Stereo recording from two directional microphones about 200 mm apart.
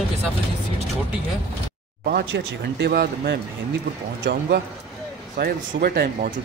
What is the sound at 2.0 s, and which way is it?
Speech, 60° right (ahead or behind).